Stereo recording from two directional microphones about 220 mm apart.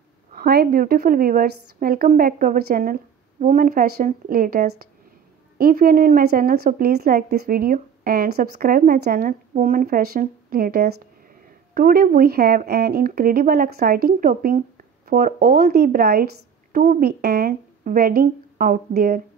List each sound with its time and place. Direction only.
0.3 s a woman's voice: 45° right (ahead or behind)